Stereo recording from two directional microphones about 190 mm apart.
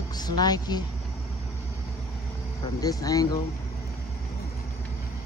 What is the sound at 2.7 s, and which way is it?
Speech, 20° left (ahead or behind).